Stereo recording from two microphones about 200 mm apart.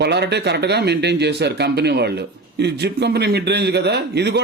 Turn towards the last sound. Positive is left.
turn(degrees=-55)  # may be behind; listen again after turning